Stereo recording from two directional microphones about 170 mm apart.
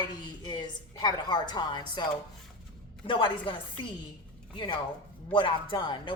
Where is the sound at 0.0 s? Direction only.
25° left (ahead or behind).